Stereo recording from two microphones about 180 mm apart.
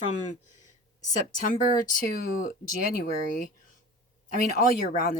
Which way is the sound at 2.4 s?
55° left (ahead or behind).